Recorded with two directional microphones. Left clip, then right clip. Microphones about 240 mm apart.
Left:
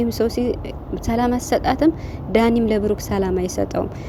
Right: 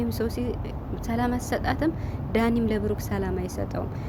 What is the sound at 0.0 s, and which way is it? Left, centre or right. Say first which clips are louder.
A woman's voice: left 9 dB; left.